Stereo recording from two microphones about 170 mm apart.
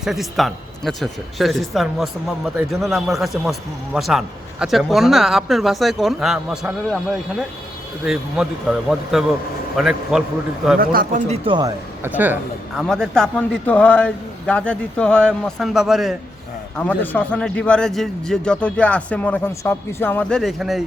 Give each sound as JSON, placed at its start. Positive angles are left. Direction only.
{"t": 0.0, "sound": "speech", "side_deg": 0}
{"t": 8.0, "sound": "speech", "side_deg": -5}
{"t": 10.8, "sound": "speech", "side_deg": -60}
{"t": 11.3, "sound": "speech", "side_deg": -30}
{"t": 12.0, "sound": "speech", "side_deg": -10}
{"t": 12.9, "sound": "speech", "side_deg": 5}
{"t": 16.7, "sound": "a man's voice", "side_deg": 10}